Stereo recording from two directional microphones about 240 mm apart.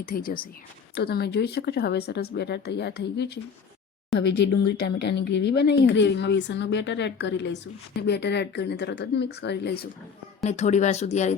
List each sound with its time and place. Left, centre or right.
0.0 s speech: left
10.4 s speech: left